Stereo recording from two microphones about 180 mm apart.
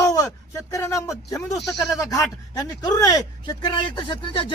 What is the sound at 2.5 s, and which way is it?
Speech, 20° left (ahead or behind).